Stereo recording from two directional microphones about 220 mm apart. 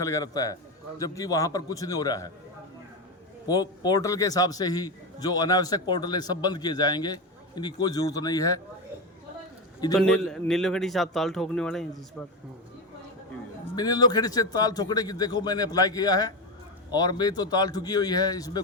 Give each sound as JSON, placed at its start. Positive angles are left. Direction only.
{"t": 0.0, "sound": "a man's voice", "side_deg": 15}
{"t": 3.4, "sound": "a man's voice", "side_deg": 15}
{"t": 9.9, "sound": "a man's voice", "side_deg": 0}
{"t": 13.7, "sound": "a man's voice", "side_deg": 20}